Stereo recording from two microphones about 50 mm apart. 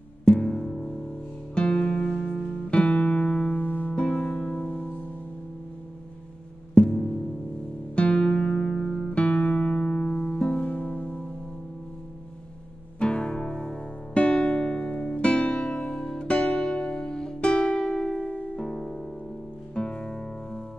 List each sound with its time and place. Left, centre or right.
0.2 s music: centre; by 3.9 s left
3.9 s music: left
6.7 s music: centre
13.0 s music: centre
18.6 s harp: centre
19.7 s music: centre